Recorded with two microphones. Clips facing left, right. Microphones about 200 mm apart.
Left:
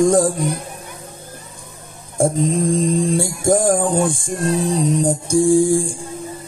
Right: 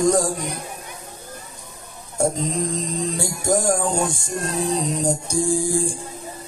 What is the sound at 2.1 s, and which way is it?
Music, 50° left (ahead or behind).